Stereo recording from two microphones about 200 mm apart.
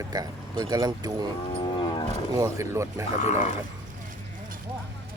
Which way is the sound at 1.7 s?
20° left (ahead or behind).